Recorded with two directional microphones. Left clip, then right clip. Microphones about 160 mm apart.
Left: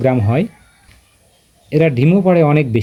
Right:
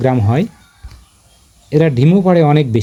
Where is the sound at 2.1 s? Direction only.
15° right (ahead or behind).